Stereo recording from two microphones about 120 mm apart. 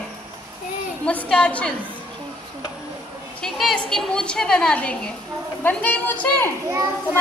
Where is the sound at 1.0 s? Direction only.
10° left (ahead or behind).